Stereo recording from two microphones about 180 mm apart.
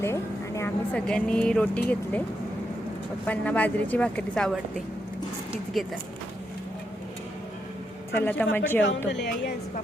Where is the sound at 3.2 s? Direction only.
10° left (ahead or behind).